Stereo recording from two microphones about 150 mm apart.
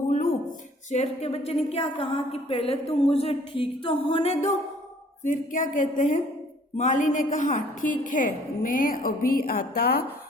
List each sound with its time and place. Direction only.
0.9 s a woman's voice: 45° left (ahead or behind)
5.2 s a woman's voice: 60° left (ahead or behind); by 10.0 s 90° left